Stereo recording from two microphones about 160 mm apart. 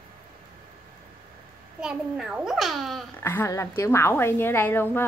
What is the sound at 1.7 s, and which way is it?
A child's voice, 5° right (ahead or behind).